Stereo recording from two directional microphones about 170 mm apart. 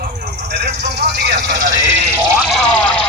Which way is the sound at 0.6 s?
80° right.